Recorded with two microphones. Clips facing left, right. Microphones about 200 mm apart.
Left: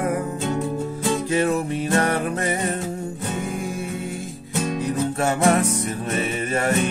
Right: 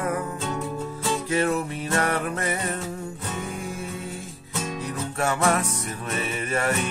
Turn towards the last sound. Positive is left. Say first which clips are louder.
# left 3 dB
turn(degrees=30)  # may be behind; listen again after turning